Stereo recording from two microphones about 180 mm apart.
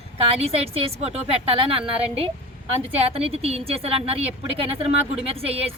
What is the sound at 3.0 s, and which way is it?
Speech, 35° right (ahead or behind).